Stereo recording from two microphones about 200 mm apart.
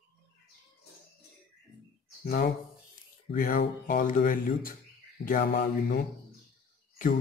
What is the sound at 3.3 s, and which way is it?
Speech, 45° left (ahead or behind).